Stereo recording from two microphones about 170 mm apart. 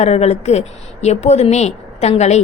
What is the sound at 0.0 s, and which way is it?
A woman's voice, 40° left (ahead or behind).